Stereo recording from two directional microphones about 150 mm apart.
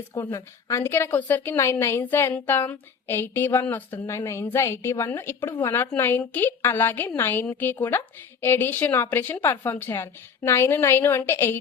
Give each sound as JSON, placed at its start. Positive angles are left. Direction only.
{"t": 0.1, "sound": "a woman's voice", "side_deg": 20}